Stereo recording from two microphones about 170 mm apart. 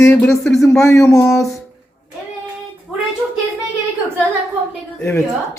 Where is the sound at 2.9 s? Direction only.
Centre (ahead or behind).